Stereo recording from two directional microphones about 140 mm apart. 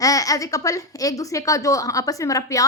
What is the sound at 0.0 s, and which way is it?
A woman's voice, 25° left (ahead or behind).